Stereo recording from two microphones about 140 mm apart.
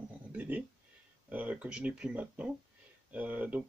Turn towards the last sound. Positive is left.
turn(degrees=-10)  # may be behind; listen again after turning